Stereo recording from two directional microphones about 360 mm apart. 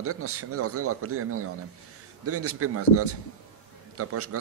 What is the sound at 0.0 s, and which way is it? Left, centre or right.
A man's voice, right.